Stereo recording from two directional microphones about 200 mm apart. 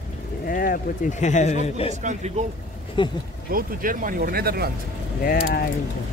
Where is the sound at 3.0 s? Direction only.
25° left (ahead or behind).